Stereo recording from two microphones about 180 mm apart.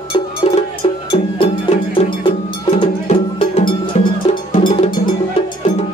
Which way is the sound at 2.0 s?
35° left (ahead or behind).